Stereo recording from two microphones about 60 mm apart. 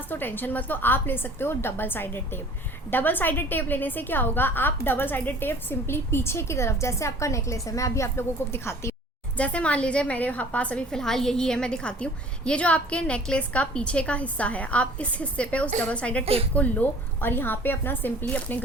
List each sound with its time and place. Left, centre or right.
0.1 s a woman's voice: left
9.4 s a woman's voice: left
10.9 s a woman's voice: centre; by 18.6 s left